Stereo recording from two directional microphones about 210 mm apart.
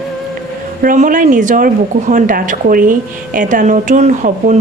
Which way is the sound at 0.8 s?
40° right (ahead or behind).